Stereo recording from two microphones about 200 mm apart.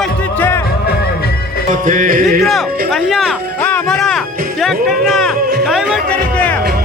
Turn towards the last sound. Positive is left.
turn(degrees=5)  # may be behind; listen again after turning